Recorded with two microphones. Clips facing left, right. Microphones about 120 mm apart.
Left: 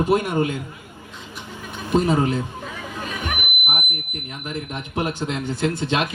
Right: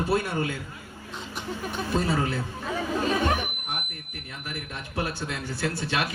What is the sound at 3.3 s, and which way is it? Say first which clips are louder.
Speech: left 3 dB; 20° left (ahead or behind).